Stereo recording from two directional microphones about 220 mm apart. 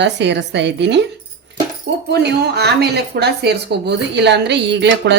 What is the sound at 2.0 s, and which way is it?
Speech, 50° right (ahead or behind).